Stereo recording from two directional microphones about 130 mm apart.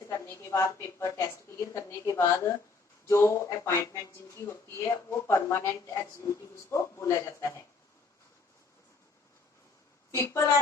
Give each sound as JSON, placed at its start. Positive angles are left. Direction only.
{"t": 0.1, "sound": "speech", "side_deg": 20}
{"t": 10.2, "sound": "speech", "side_deg": 25}